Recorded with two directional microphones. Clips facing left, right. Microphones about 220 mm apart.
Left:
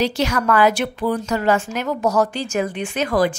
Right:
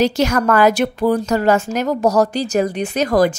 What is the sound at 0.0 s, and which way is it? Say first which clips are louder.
A woman's voice: right 4 dB; 45° right (ahead or behind).